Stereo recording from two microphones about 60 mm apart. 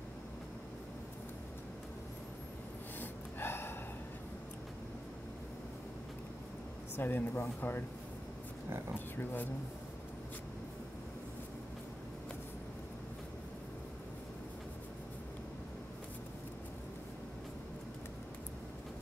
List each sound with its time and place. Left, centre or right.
3.0 s gasp: left
7.0 s speech: left
9.1 s speech: left